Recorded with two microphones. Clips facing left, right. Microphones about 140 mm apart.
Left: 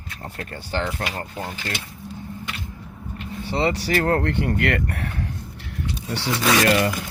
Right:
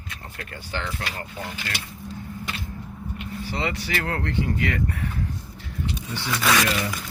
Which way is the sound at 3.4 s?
30° left (ahead or behind).